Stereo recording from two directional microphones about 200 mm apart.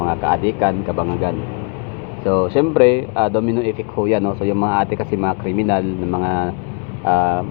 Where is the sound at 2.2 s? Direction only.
25° right (ahead or behind).